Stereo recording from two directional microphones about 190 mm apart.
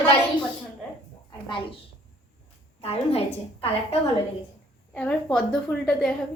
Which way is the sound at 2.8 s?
30° left (ahead or behind).